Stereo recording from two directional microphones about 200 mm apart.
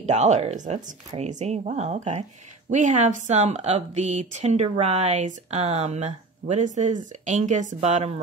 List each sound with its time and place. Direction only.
0.0 s speech: 35° right (ahead or behind)